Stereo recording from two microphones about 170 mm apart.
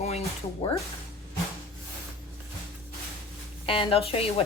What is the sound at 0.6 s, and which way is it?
Speech, 35° left (ahead or behind).